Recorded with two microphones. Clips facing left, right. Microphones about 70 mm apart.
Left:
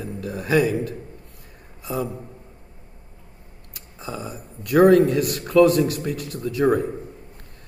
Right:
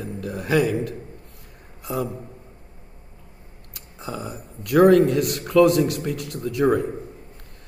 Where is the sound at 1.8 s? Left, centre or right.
Right.